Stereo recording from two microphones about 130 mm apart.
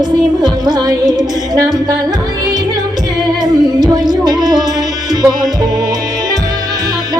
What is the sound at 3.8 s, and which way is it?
Music, 30° right (ahead or behind).